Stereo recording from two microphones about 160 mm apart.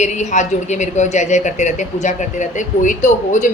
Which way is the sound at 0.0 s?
45° left (ahead or behind).